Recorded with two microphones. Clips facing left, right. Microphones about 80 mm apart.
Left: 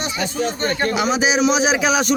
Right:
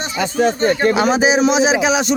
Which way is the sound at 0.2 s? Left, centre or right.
Right.